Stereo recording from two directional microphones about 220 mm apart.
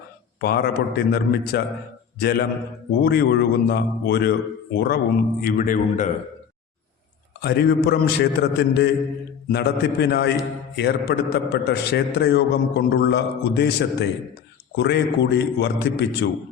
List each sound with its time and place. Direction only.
0.4 s a man's voice: 45° left (ahead or behind)
7.4 s a man's voice: 45° left (ahead or behind)